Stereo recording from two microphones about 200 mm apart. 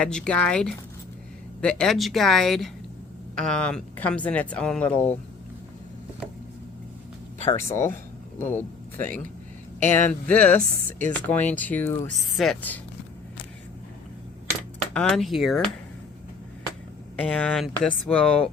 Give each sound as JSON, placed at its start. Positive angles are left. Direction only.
{"t": 0.0, "sound": "speech", "side_deg": 5}
{"t": 7.5, "sound": "speech", "side_deg": 15}
{"t": 14.9, "sound": "speech", "side_deg": 0}
{"t": 17.2, "sound": "speech", "side_deg": 5}